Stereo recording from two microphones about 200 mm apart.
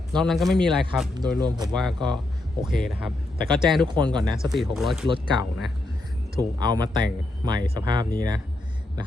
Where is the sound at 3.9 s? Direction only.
20° right (ahead or behind).